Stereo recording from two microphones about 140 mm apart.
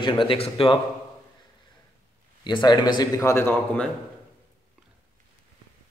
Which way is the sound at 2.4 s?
30° left (ahead or behind).